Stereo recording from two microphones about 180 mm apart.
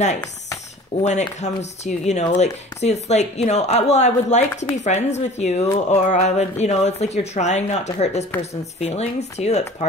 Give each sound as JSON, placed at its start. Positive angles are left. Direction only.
{"t": 1.0, "sound": "speech", "side_deg": 40}